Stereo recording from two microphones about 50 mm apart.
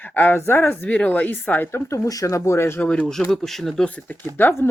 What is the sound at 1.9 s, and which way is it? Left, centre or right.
Speech, left.